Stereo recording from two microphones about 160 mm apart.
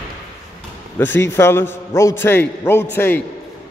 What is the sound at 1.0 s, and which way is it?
A man's voice, 15° left (ahead or behind).